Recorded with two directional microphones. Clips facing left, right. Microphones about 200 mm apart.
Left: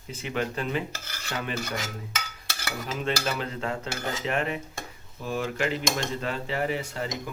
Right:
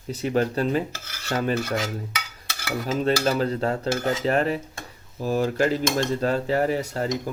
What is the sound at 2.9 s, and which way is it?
A man's voice, 40° right (ahead or behind).